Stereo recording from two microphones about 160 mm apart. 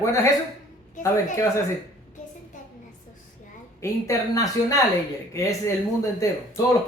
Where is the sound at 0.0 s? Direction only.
15° left (ahead or behind).